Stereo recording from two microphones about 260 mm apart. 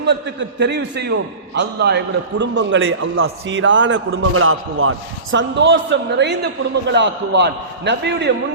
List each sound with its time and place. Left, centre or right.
0.0 s a man's voice: right